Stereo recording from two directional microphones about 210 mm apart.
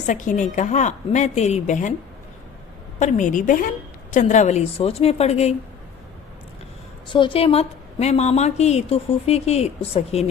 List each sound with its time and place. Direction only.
0.1 s a woman's voice: 35° left (ahead or behind)
3.0 s a woman's voice: 35° left (ahead or behind)
7.1 s a woman's voice: 25° left (ahead or behind)